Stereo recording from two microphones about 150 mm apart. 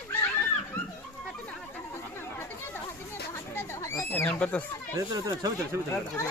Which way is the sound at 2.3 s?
15° left (ahead or behind).